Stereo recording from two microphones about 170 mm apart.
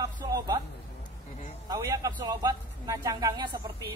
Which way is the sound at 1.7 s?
20° right (ahead or behind).